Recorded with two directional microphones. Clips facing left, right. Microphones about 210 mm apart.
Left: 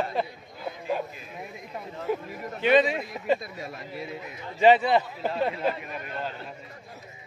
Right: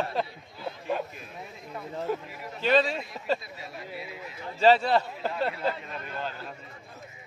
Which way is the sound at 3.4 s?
45° left (ahead or behind).